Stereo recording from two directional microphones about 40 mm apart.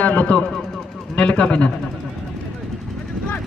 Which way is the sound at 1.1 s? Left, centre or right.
Left.